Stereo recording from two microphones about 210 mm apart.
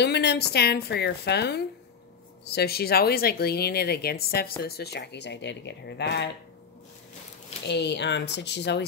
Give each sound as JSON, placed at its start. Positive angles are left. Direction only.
{"t": 0.0, "sound": "speech", "side_deg": 55}
{"t": 7.6, "sound": "speech", "side_deg": 55}